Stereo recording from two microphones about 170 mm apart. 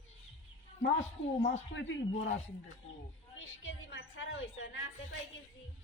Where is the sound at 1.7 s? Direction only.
90° left.